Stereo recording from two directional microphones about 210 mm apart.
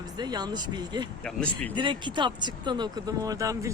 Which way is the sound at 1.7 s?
20° right (ahead or behind).